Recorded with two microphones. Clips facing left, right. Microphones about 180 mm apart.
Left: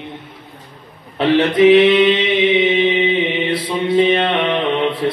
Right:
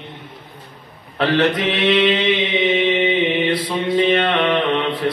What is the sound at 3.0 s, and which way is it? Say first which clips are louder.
Mantra: even; 25° left (ahead or behind).